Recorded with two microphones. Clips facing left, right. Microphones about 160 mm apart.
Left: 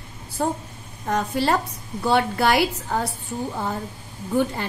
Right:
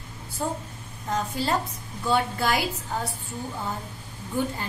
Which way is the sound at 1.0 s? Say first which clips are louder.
Left 5 dB; 70° left (ahead or behind).